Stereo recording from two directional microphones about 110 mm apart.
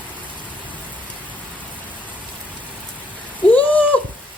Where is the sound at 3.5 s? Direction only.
15° left (ahead or behind).